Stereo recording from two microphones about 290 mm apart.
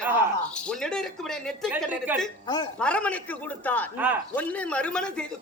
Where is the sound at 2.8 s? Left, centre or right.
Centre.